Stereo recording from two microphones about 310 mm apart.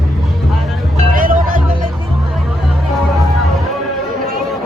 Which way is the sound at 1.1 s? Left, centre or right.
Right.